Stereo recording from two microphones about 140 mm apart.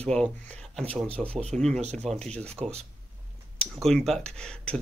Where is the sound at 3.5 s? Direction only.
Centre (ahead or behind).